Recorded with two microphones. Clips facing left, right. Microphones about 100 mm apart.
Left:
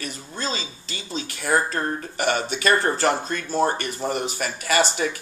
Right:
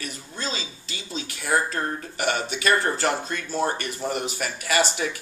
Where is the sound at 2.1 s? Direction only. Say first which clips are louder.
Left 3 dB; 5° right (ahead or behind).